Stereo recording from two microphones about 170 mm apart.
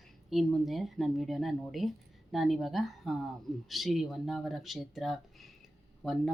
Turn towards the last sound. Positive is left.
turn(degrees=0)  # may be behind; listen again after turning